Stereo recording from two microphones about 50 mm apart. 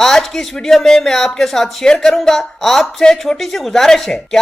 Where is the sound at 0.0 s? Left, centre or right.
Centre.